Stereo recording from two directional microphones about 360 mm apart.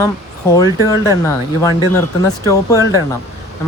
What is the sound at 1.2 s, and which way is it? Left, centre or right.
Speech, centre.